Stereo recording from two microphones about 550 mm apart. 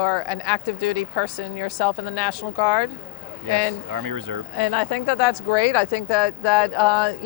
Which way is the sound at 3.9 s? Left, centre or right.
Right.